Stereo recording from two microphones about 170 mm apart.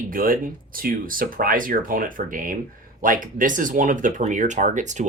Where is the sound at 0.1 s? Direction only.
55° right (ahead or behind).